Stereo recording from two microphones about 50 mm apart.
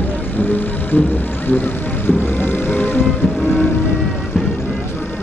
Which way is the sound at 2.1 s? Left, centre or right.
Left.